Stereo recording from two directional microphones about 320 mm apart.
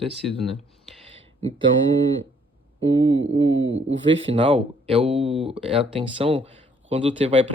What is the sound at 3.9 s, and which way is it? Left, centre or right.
Speech, centre.